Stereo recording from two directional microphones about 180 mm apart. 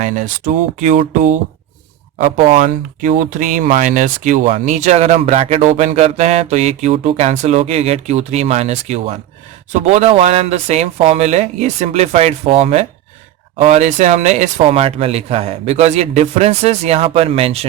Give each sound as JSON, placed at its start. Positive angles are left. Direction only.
{"t": 0.0, "sound": "speech", "side_deg": -45}
{"t": 2.5, "sound": "speech", "side_deg": -50}